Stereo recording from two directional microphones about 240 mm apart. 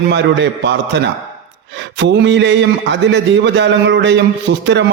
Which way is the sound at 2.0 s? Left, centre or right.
Right.